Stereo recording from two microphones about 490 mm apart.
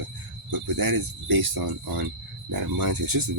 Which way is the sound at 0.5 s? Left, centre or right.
Right.